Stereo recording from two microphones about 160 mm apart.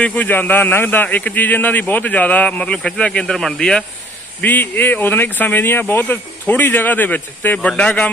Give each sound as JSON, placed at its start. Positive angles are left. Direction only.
{"t": 0.0, "sound": "a man's voice", "side_deg": 10}